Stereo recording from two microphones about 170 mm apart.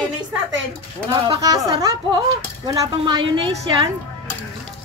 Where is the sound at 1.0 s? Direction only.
20° right (ahead or behind).